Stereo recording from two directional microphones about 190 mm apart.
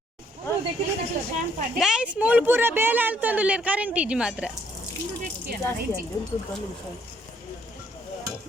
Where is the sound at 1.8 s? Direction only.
5° right (ahead or behind).